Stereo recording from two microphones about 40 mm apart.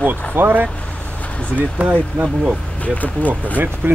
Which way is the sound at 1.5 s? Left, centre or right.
Right.